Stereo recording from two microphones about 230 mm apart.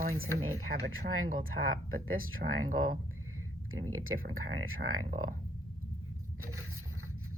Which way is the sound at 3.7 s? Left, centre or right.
Right.